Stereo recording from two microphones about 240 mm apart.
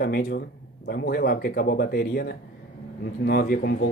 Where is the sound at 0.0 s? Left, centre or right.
Left.